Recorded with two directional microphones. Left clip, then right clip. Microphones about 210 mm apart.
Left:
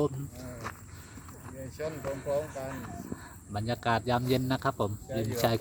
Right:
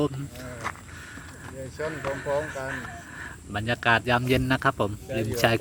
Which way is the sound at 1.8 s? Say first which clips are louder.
Right 5 dB; 20° right (ahead or behind).